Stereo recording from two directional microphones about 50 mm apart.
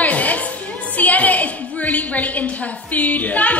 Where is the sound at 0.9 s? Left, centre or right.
Left.